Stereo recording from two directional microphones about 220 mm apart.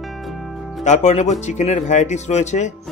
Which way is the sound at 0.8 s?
30° left (ahead or behind).